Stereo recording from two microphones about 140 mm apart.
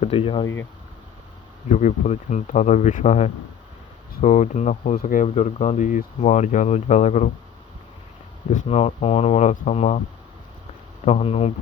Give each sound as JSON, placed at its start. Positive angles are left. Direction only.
{"t": 0.0, "sound": "speech", "side_deg": 45}
{"t": 1.7, "sound": "speech", "side_deg": 60}
{"t": 8.5, "sound": "speech", "side_deg": 50}
{"t": 11.0, "sound": "speech", "side_deg": 50}